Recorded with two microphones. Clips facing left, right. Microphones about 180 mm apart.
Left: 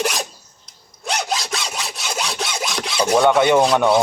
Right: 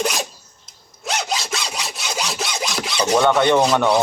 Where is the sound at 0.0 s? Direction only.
Centre (ahead or behind).